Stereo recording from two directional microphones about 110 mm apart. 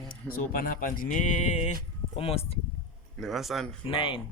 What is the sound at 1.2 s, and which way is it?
Music, 90° left.